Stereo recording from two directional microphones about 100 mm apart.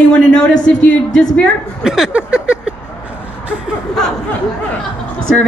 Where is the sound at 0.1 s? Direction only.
10° left (ahead or behind).